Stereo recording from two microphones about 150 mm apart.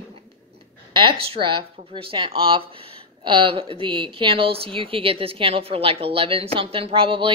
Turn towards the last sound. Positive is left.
turn(degrees=-35)  # may be behind; listen again after turning